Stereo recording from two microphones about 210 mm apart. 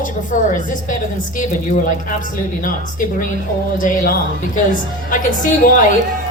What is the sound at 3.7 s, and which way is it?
A woman's voice, 40° left (ahead or behind).